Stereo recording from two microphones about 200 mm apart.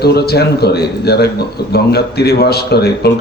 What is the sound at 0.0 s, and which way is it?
Speech, 55° left (ahead or behind).